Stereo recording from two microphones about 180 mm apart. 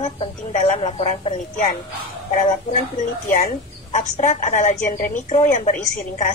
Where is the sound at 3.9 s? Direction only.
40° left (ahead or behind).